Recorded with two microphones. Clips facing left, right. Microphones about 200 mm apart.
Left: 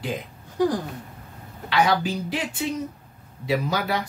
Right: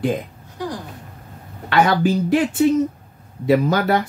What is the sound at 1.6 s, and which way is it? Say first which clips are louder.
Speech: right 5 dB; 50° right (ahead or behind).